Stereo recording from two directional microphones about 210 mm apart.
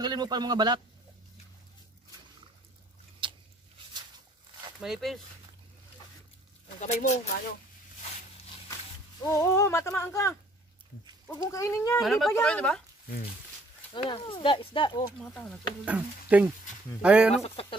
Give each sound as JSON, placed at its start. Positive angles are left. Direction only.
{"t": 0.0, "sound": "a man's voice", "side_deg": -20}
{"t": 3.2, "sound": "a sound", "side_deg": -25}
{"t": 4.7, "sound": "a woman's voice", "side_deg": 0}
{"t": 6.8, "sound": "speech", "side_deg": 35}
{"t": 9.3, "sound": "speech", "side_deg": 15}
{"t": 12.0, "sound": "a woman's voice", "side_deg": 0}
{"t": 13.9, "sound": "speech", "side_deg": 25}
{"t": 15.3, "sound": "a woman's voice", "side_deg": 5}
{"t": 15.8, "sound": "a woman's voice", "side_deg": -5}
{"t": 17.4, "sound": "speech", "side_deg": 25}